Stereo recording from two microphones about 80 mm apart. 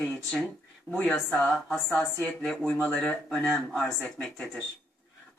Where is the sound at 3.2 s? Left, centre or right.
Centre.